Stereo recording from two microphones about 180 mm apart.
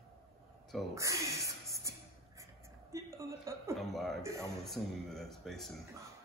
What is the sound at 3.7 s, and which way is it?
Speech, centre (ahead or behind).